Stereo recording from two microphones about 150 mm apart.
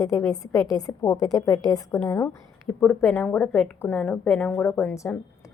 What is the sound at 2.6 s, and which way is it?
A woman's voice, 10° left (ahead or behind).